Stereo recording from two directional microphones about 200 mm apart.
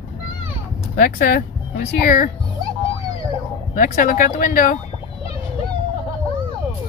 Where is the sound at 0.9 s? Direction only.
45° left (ahead or behind).